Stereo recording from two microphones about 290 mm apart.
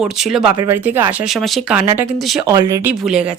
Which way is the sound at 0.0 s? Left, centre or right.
Centre.